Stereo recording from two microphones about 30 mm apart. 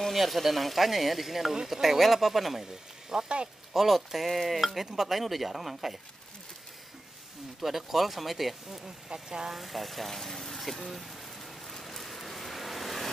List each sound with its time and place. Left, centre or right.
0.1 s speech: centre
2.6 s speech: centre
3.7 s speech: centre
7.6 s speech: centre
8.6 s speech: centre
9.5 s a sound: centre